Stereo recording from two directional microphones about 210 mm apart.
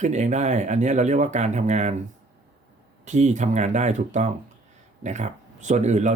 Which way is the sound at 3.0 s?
35° right (ahead or behind).